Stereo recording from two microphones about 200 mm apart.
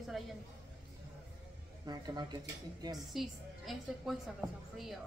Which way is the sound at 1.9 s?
20° right (ahead or behind).